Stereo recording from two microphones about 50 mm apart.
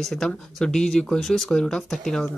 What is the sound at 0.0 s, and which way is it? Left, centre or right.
Speech, centre.